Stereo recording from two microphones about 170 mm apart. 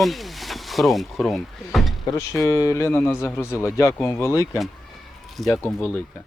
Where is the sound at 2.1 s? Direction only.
15° left (ahead or behind).